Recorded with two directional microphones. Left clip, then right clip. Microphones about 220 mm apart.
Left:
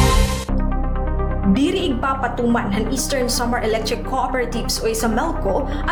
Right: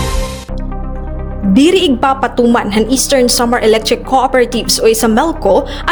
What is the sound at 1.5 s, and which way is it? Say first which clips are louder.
A woman's voice: right 12 dB; 45° right (ahead or behind).